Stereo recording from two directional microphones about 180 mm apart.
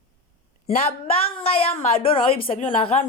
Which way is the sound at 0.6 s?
35° left (ahead or behind).